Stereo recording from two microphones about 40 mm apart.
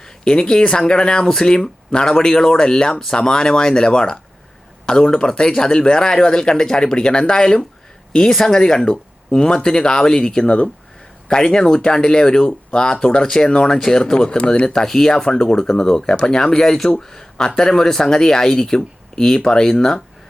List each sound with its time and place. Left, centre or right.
0.0 s speech: centre